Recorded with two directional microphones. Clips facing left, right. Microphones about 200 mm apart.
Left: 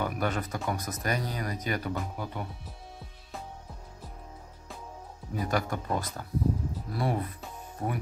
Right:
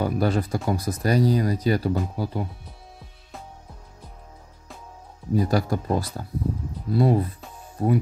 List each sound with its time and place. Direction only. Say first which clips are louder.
0.0 s speech: right 7 dB; 35° right (ahead or behind)
5.3 s speech: right 8 dB; 35° right (ahead or behind)